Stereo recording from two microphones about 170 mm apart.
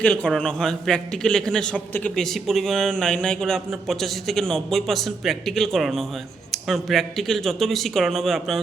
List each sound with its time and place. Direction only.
0.0 s a man's voice: 5° left (ahead or behind)